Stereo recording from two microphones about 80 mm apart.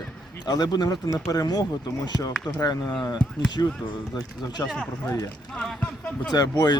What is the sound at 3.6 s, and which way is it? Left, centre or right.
Speech, left.